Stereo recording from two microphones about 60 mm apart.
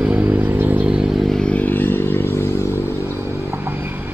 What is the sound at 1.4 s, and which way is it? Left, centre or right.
Vehicle, left.